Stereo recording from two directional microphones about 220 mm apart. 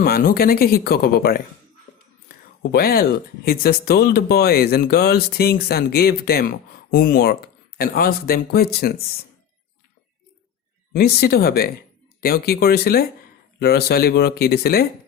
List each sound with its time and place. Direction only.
0.0 s speech: 45° left (ahead or behind)
2.7 s speech: 45° left (ahead or behind)
10.9 s speech: 45° left (ahead or behind)